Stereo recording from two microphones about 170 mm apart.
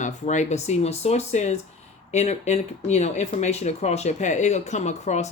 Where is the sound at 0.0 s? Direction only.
45° left (ahead or behind).